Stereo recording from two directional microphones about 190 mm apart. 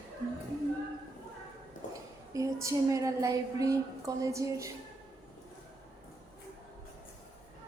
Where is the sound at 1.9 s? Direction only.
15° right (ahead or behind).